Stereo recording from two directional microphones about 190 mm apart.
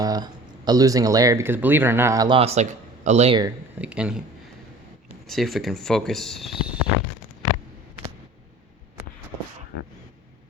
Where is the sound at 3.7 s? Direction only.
5° right (ahead or behind).